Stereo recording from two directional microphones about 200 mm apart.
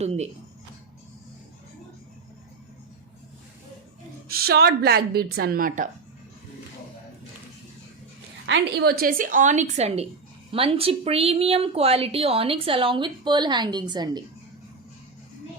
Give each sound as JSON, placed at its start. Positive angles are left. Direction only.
{"t": 0.0, "sound": "speech", "side_deg": -30}
{"t": 4.3, "sound": "a woman's voice", "side_deg": -50}
{"t": 8.4, "sound": "a woman's voice", "side_deg": -60}